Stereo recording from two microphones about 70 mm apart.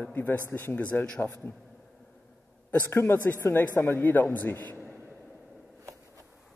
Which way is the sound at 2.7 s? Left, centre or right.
Left.